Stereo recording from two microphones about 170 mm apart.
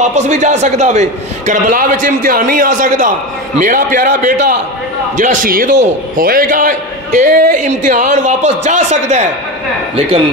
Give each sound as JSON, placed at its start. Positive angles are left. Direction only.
{"t": 0.0, "sound": "a man's voice", "side_deg": -45}